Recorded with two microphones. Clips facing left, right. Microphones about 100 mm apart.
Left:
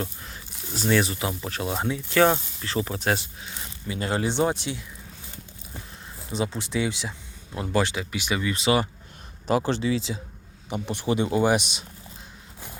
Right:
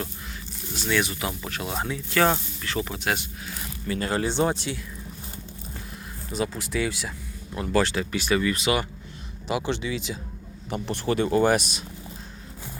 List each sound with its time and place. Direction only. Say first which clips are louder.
0.7 s speech: left 3 dB; 35° left (ahead or behind)
2.1 s speech: left 2 dB; 10° left (ahead or behind)
2.6 s speech: left 1 dB; 30° left (ahead or behind)
6.3 s speech: even; 25° left (ahead or behind)
8.5 s speech: left 2 dB; 30° left (ahead or behind)
10.8 s speech: even; 15° left (ahead or behind)